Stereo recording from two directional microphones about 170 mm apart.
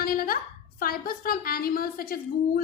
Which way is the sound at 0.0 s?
60° left (ahead or behind).